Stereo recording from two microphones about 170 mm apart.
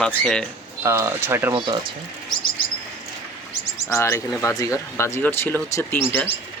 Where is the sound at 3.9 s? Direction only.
15° left (ahead or behind).